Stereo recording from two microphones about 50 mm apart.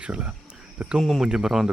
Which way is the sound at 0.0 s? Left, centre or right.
Right.